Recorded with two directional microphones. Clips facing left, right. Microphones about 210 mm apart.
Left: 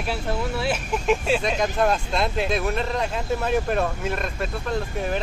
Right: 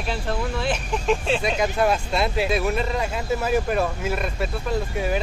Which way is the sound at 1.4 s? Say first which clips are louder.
Right 1 dB; 5° right (ahead or behind).